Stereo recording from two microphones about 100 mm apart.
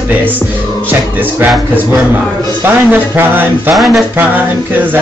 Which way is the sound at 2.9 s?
20° right (ahead or behind).